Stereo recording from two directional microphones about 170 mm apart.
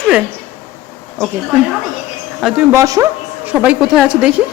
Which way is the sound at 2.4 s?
Centre (ahead or behind).